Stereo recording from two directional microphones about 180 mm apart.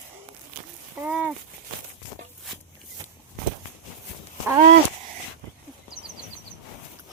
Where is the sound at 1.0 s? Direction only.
5° right (ahead or behind).